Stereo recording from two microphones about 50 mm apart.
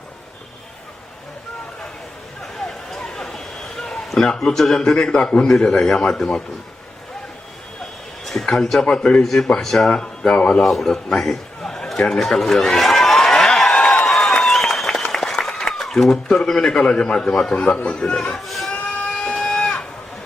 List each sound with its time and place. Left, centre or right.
2.4 s a sound: centre
5.7 s a man's voice: centre
8.2 s a sound: centre
8.4 s a man's voice: centre
9.2 s a man's voice: centre
9.9 s speech: centre
10.6 s speech: centre
11.2 s a sound: centre
14.4 s applause: centre
16.4 s a man's voice: centre
18.3 s speech: centre
18.7 s a sound: left